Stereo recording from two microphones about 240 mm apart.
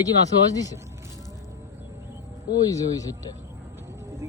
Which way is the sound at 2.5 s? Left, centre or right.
Centre.